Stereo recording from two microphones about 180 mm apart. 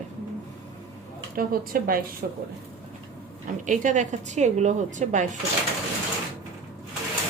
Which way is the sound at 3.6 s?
45° right (ahead or behind).